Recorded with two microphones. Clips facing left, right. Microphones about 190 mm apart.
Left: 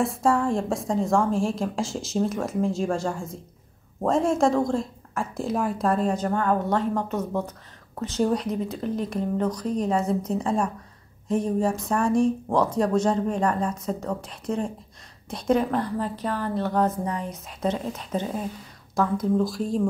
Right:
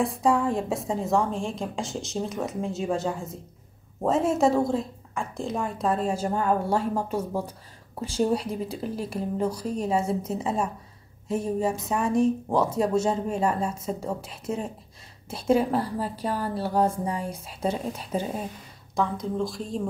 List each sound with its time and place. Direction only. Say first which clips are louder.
0.0 s a woman's voice: left 1 dB; centre (ahead or behind)
18.9 s a woman's voice: left 4 dB; 5° left (ahead or behind)